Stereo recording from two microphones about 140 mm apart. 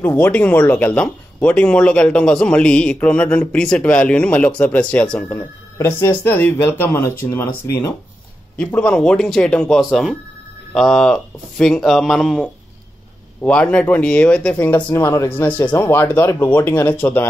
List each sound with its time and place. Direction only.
0.0 s speech: 15° left (ahead or behind)